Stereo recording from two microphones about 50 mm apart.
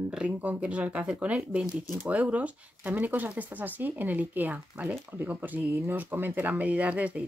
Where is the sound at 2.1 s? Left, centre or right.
Right.